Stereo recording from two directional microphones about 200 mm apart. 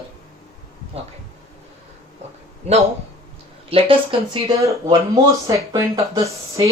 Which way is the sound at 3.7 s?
25° right (ahead or behind).